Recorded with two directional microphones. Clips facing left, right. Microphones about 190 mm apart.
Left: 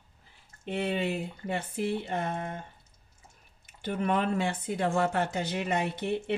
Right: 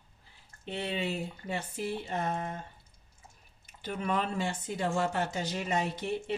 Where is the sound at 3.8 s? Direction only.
55° left (ahead or behind).